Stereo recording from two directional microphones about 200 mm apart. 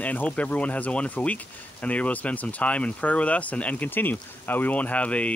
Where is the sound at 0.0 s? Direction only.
5° left (ahead or behind).